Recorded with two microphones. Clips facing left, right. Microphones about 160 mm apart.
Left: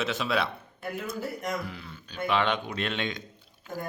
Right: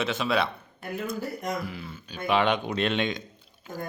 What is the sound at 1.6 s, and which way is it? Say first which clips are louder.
Speech: right 3 dB; 5° right (ahead or behind).